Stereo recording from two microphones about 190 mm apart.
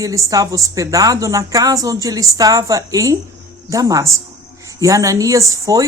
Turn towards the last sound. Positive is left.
turn(degrees=-15)  # may be behind; listen again after turning